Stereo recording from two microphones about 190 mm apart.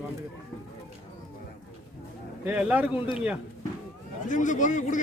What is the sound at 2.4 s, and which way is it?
Speech, 10° right (ahead or behind).